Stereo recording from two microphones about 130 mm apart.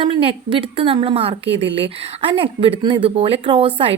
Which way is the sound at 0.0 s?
40° right (ahead or behind).